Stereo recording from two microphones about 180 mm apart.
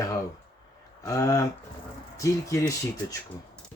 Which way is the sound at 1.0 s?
20° left (ahead or behind).